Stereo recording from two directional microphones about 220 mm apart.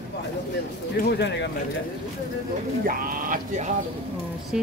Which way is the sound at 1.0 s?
50° left (ahead or behind).